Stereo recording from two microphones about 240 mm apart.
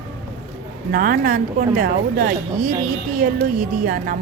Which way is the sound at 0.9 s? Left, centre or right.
Right.